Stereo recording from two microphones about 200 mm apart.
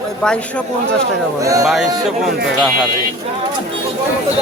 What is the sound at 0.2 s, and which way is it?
Speech, 5° left (ahead or behind).